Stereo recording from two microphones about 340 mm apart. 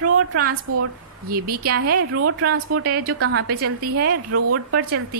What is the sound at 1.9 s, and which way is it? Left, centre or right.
A woman's voice, right.